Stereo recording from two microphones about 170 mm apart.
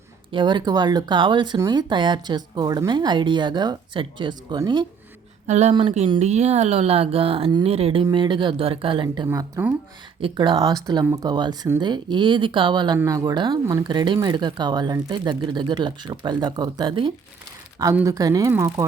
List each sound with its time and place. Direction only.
0.3 s speech: 25° right (ahead or behind)
5.5 s speech: 40° right (ahead or behind)
9.3 s speech: 15° right (ahead or behind)
10.2 s speech: 30° right (ahead or behind)